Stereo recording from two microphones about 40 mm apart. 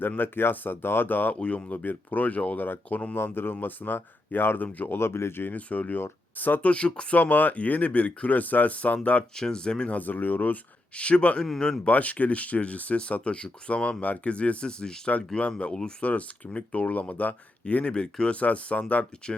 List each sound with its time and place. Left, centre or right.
0.2 s speech: left
1.4 s speech: left
1.8 s speech: left
3.2 s speech: left
4.9 s speech: left
5.5 s speech: left
6.7 s speech: left
7.2 s speech: left
9.3 s speech: centre
9.9 s speech: left
10.9 s speech: left
14.6 s speech: left
17.9 s speech: left